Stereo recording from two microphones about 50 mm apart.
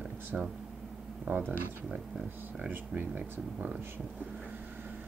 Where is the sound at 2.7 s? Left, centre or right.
Right.